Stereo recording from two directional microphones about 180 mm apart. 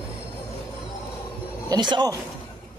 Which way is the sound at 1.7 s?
25° right (ahead or behind).